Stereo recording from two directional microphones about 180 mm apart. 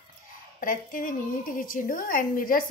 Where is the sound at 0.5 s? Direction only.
50° left (ahead or behind).